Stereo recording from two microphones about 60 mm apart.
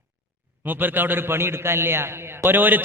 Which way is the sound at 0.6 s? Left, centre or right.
Right.